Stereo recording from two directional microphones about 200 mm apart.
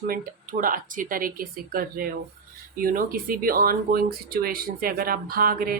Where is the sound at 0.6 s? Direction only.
40° right (ahead or behind).